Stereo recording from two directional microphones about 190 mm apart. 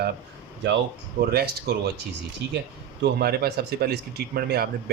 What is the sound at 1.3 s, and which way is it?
Speech, 55° right (ahead or behind).